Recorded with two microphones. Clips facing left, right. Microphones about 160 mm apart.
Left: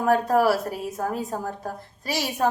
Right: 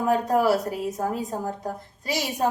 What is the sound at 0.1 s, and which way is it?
A woman's voice, 20° right (ahead or behind).